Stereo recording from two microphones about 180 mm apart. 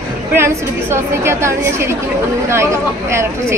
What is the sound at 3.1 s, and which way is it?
Speech, 15° right (ahead or behind).